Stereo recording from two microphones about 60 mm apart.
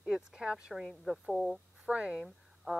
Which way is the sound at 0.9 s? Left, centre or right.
Centre.